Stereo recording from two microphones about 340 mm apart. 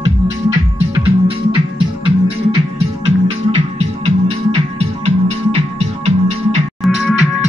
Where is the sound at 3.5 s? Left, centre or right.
Centre.